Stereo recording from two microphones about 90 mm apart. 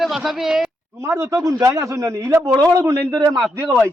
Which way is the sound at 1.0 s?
30° right (ahead or behind).